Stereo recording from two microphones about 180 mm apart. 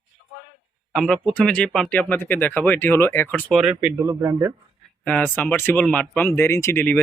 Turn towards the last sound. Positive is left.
turn(degrees=10)  # may be behind; listen again after turning